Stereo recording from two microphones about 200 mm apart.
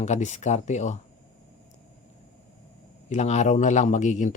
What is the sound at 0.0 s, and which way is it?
Speech, 35° left (ahead or behind).